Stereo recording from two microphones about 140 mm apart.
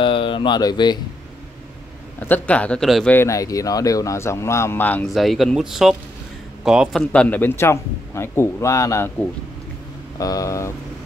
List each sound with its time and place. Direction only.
0.0 s speech: 35° left (ahead or behind)
2.1 s a man's voice: 10° left (ahead or behind)
3.2 s speech: 25° left (ahead or behind)
5.0 s speech: centre (ahead or behind)
7.0 s a man's voice: 10° left (ahead or behind)
10.1 s speech: 25° left (ahead or behind)